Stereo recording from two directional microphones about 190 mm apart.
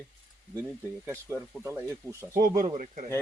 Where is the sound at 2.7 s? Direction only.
40° right (ahead or behind).